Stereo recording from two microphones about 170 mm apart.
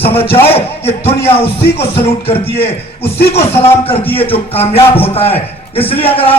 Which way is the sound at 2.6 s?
70° left (ahead or behind).